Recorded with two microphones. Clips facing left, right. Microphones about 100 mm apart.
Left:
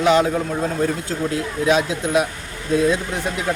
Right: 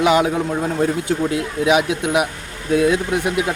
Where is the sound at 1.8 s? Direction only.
70° right (ahead or behind).